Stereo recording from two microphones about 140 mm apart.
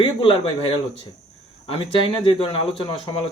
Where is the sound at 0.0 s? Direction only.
40° left (ahead or behind).